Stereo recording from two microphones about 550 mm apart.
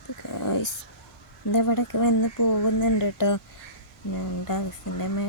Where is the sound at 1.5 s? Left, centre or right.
Left.